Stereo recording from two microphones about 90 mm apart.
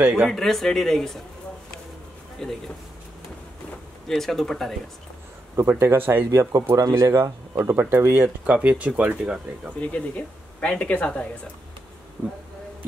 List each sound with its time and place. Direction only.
0.3 s speech: 5° left (ahead or behind)
2.4 s speech: 5° left (ahead or behind)
4.1 s speech: 5° left (ahead or behind)
5.6 s speech: 25° right (ahead or behind)
9.8 s a woman's voice: 15° left (ahead or behind)